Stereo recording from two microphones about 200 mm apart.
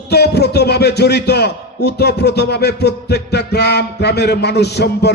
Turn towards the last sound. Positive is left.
turn(degrees=55)  # may be behind; listen again after turning